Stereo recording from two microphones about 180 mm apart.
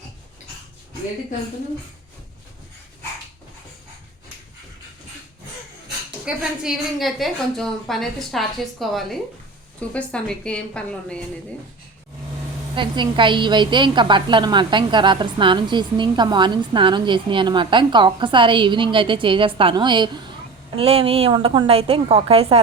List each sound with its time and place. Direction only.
6.2 s a woman's voice: 5° right (ahead or behind)
12.7 s a woman's voice: 25° right (ahead or behind)